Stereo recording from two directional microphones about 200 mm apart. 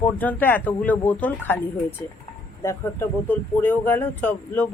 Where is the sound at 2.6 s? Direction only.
15° left (ahead or behind).